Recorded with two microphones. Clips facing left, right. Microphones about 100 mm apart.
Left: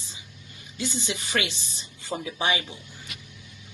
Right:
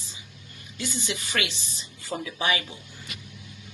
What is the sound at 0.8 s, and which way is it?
Speech, 30° left (ahead or behind).